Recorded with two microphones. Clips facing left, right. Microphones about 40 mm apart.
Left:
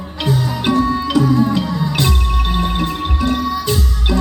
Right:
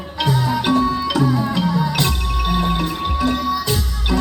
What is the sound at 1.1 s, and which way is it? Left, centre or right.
Music, centre.